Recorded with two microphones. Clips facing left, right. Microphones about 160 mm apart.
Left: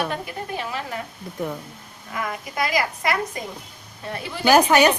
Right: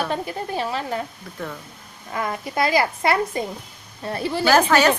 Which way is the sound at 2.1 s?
30° right (ahead or behind).